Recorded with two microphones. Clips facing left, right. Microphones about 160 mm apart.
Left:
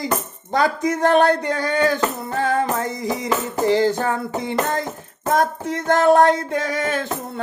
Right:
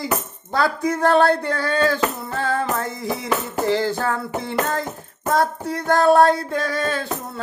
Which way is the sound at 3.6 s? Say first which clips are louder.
Left 4 dB; 15° left (ahead or behind).